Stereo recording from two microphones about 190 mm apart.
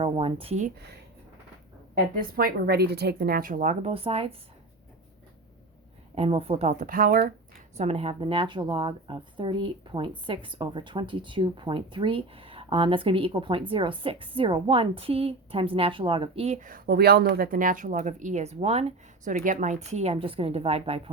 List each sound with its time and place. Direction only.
0.0 s speech: 30° right (ahead or behind)
2.1 s speech: 50° right (ahead or behind); by 4.4 s 30° right (ahead or behind)
6.1 s speech: 30° right (ahead or behind); by 7.3 s 50° right (ahead or behind)
7.8 s speech: 35° right (ahead or behind)